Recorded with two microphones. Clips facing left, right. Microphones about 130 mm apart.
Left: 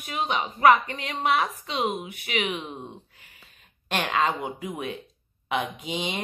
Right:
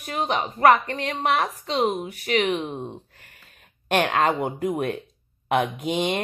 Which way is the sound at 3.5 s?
55° right (ahead or behind).